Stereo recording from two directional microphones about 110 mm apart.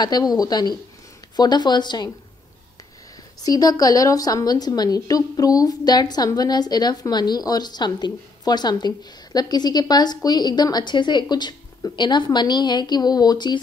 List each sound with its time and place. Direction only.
0.0 s a woman's voice: 35° left (ahead or behind)
3.4 s a woman's voice: 35° left (ahead or behind)